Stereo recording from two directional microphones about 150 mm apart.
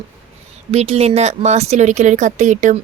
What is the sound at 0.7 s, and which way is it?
A woman's voice, 45° right (ahead or behind).